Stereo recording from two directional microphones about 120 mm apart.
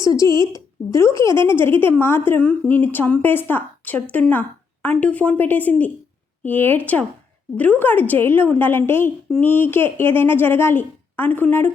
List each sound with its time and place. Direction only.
0.0 s a woman's voice: 25° left (ahead or behind)